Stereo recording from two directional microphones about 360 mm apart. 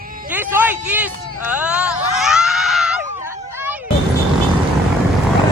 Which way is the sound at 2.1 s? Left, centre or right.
Centre.